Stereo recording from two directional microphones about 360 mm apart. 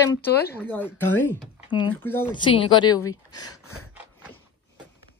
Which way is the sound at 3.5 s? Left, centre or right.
Left.